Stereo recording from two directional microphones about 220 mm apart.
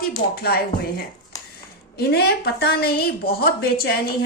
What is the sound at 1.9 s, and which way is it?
A woman's voice, 45° left (ahead or behind).